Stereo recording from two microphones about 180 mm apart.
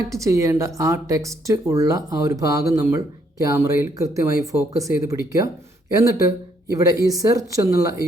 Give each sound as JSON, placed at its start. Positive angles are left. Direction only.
{"t": 0.1, "sound": "speech", "side_deg": -15}